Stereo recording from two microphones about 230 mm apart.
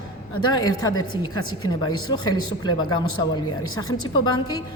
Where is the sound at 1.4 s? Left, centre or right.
Left.